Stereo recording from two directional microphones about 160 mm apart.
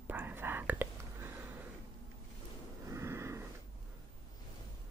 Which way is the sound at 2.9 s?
15° right (ahead or behind).